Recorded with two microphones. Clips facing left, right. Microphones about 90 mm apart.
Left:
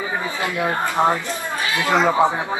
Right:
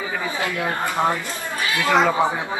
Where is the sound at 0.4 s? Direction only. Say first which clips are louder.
Left 3 dB; 20° left (ahead or behind).